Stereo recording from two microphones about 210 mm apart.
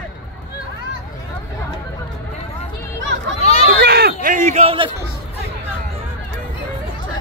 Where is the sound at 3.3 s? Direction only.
30° left (ahead or behind).